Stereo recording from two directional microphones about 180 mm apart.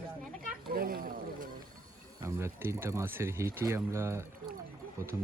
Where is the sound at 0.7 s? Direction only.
55° right (ahead or behind).